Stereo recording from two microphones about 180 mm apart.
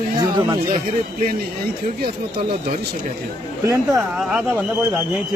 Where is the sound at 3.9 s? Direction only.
5° right (ahead or behind).